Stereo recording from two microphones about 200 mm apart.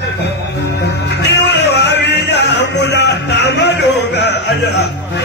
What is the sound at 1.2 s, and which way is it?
Music, 60° left (ahead or behind).